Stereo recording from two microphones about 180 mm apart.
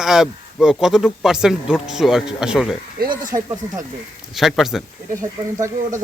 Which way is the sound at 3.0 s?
50° right (ahead or behind).